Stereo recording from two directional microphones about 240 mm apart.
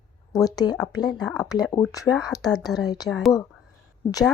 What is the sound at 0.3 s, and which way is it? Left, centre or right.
Speech, centre.